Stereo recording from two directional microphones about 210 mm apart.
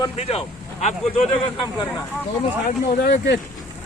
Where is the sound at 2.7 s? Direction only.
50° left (ahead or behind).